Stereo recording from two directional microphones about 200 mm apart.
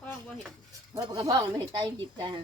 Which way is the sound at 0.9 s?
20° right (ahead or behind).